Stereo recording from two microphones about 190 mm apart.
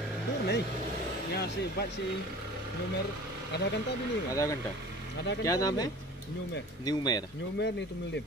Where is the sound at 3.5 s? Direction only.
60° left (ahead or behind).